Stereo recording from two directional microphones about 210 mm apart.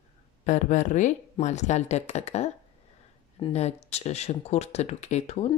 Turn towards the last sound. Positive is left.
turn(degrees=30)  # may be behind; listen again after turning